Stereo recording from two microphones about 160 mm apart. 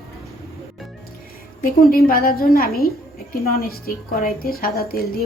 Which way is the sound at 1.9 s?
70° left (ahead or behind).